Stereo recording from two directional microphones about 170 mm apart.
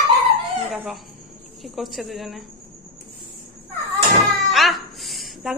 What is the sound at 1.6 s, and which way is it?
Speech, centre (ahead or behind).